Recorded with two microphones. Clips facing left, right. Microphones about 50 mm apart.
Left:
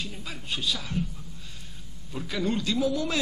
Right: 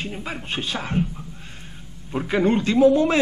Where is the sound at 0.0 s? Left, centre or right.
Right.